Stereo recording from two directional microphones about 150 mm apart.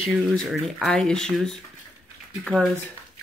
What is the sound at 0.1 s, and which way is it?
A woman's voice, centre (ahead or behind).